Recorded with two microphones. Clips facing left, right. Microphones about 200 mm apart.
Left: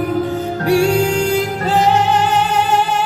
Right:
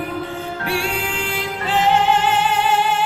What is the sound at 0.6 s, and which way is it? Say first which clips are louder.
Music: left 12 dB; 40° left (ahead or behind).